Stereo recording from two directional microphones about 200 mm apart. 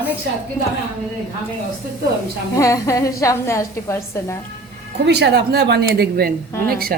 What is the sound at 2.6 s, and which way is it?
A woman's voice, 15° left (ahead or behind).